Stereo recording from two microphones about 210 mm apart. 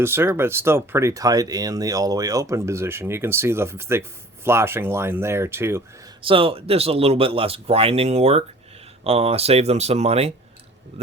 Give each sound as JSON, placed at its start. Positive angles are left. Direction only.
{"t": 0.0, "sound": "speech", "side_deg": -10}
{"t": 6.2, "sound": "speech", "side_deg": -25}